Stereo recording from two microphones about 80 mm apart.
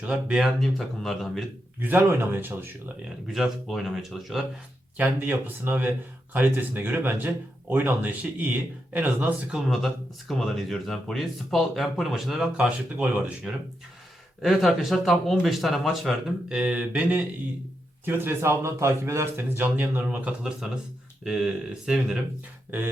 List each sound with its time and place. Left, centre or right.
0.0 s speech: centre
0.6 s speech: centre
1.8 s speech: right
3.2 s speech: centre
4.9 s speech: right
9.6 s speech: centre
12.5 s speech: centre
14.4 s speech: centre
16.5 s speech: centre
18.0 s speech: right
21.2 s speech: centre